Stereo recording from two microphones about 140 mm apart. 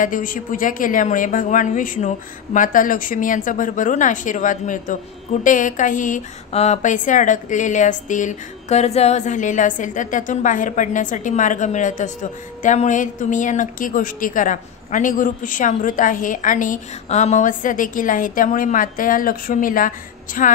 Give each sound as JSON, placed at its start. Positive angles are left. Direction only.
{"t": 0.0, "sound": "a woman's voice", "side_deg": 75}
{"t": 6.5, "sound": "a woman's voice", "side_deg": 55}